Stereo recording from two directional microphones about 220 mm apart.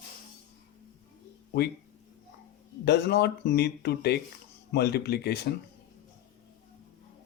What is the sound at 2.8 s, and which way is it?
Speech, 50° left (ahead or behind).